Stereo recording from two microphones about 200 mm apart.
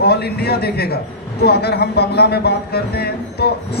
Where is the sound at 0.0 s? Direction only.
55° left (ahead or behind).